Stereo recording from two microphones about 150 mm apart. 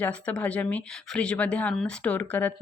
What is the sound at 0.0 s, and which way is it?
A woman's voice, 10° left (ahead or behind).